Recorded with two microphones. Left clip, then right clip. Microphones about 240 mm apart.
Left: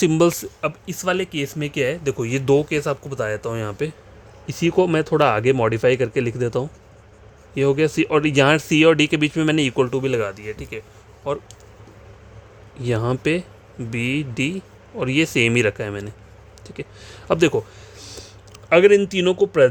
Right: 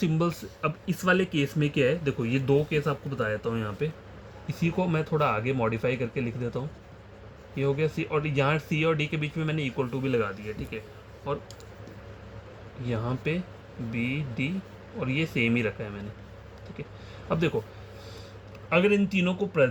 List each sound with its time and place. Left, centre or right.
0.0 s speech: left
0.6 s speech: left
2.5 s speech: left
12.8 s speech: left
17.2 s a man's voice: left
18.7 s speech: left